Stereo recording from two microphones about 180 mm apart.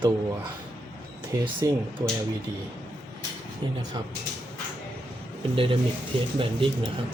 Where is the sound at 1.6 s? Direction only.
20° right (ahead or behind).